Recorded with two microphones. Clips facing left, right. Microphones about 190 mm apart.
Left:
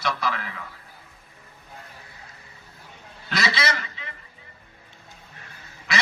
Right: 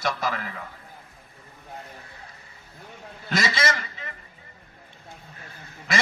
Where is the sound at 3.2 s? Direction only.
45° right (ahead or behind).